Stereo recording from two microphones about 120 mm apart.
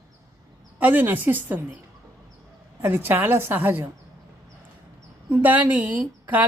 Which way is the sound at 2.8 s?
15° right (ahead or behind).